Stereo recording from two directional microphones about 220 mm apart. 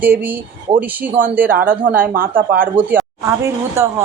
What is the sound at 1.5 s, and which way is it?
Speech, 40° right (ahead or behind).